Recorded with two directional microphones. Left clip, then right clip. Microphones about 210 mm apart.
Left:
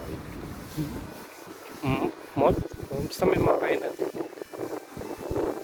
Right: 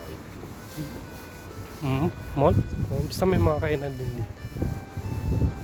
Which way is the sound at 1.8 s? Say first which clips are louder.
Left 1 dB; centre (ahead or behind).